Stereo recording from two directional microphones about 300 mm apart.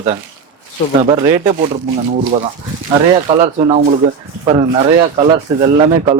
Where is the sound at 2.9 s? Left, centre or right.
Centre.